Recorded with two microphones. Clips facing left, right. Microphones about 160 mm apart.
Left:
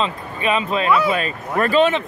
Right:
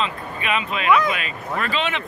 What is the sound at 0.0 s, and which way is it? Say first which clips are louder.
Speech: left 4 dB; 35° left (ahead or behind).